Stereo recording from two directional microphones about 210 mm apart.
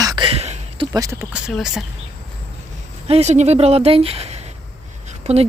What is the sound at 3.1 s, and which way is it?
Speech, 30° right (ahead or behind).